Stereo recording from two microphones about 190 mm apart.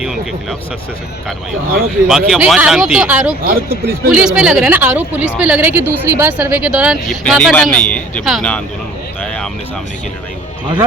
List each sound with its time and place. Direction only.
2.0 s speech: 5° right (ahead or behind)
3.4 s speech: 50° right (ahead or behind)
4.1 s speech: 5° right (ahead or behind)
9.2 s a sound: 5° left (ahead or behind)